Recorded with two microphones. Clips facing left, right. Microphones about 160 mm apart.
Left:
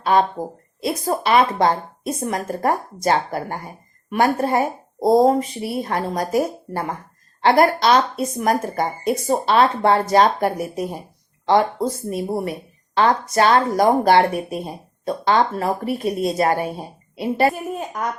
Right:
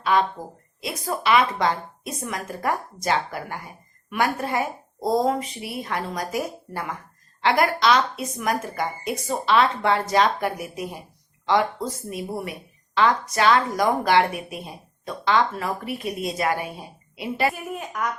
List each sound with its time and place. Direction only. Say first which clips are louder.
0.0 s a woman's voice: left 4 dB; 40° left (ahead or behind)